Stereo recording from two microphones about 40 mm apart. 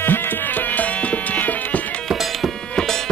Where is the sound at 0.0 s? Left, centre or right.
Left.